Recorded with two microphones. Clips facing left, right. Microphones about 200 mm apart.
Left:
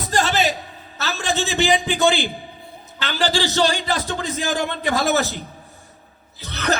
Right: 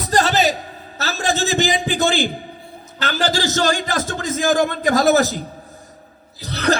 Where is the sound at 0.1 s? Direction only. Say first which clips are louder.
Right 3 dB; 40° right (ahead or behind).